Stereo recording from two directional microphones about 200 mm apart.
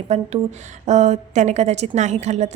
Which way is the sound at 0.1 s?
30° right (ahead or behind).